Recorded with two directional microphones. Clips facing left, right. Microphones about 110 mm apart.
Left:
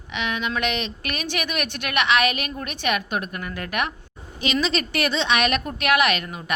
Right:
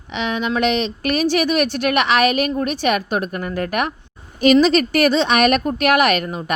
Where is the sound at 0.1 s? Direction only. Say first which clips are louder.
Right 5 dB; 35° right (ahead or behind).